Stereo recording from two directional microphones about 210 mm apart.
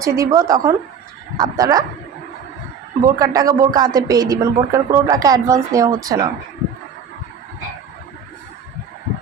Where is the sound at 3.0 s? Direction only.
15° right (ahead or behind).